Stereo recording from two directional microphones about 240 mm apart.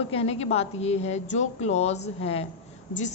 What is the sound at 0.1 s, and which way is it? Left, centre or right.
A woman's voice, left.